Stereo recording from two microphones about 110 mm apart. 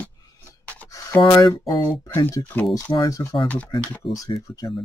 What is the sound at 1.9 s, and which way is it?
Speech, 20° left (ahead or behind).